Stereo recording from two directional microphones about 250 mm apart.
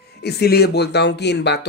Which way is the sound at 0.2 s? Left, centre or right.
Left.